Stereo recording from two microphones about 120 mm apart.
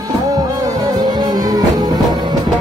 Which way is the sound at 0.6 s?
35° right (ahead or behind).